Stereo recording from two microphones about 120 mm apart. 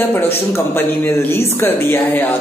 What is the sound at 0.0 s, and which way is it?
A man's voice, 15° left (ahead or behind).